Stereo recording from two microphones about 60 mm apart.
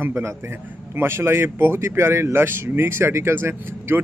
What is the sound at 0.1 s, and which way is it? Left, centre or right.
A man's voice, right.